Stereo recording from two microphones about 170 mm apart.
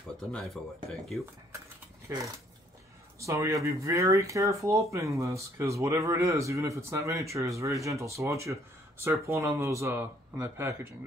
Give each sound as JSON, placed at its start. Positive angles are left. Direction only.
{"t": 0.3, "sound": "speech", "side_deg": 0}
{"t": 2.1, "sound": "speech", "side_deg": -15}